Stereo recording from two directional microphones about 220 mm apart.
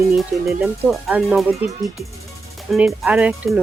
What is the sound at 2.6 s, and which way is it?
Speech, centre (ahead or behind).